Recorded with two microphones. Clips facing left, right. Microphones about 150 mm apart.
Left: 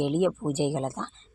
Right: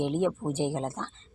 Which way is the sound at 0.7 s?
10° left (ahead or behind).